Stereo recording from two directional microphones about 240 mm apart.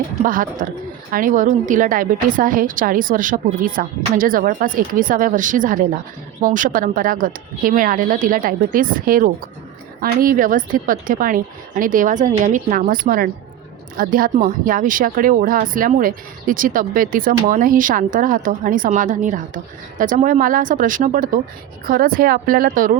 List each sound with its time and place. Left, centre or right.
0.2 s speech: right